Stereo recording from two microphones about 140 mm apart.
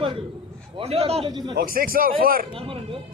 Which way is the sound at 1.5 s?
90° right.